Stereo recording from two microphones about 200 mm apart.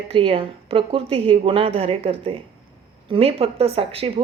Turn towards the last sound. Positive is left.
turn(degrees=-30)  # may be behind; listen again after turning